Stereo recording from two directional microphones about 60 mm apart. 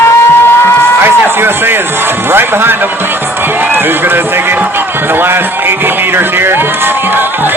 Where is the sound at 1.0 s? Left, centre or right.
Right.